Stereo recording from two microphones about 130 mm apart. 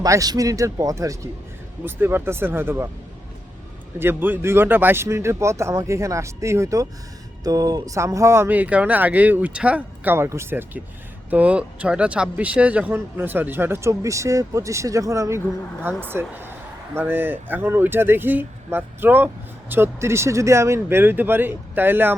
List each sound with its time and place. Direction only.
0.0 s speech: 30° right (ahead or behind)
4.0 s speech: 15° right (ahead or behind)